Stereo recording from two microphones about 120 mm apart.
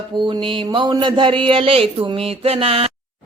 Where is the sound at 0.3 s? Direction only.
45° right (ahead or behind).